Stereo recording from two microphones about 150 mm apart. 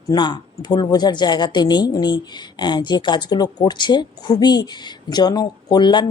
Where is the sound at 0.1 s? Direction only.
30° left (ahead or behind).